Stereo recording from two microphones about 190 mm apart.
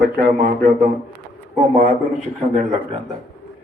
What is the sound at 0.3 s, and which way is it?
Speech, 40° right (ahead or behind).